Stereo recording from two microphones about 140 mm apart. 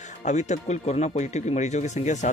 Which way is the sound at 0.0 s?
55° left (ahead or behind).